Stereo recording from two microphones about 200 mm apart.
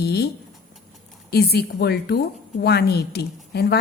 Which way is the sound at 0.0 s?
55° left (ahead or behind).